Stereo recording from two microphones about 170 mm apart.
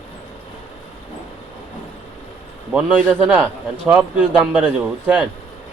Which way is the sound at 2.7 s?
5° right (ahead or behind).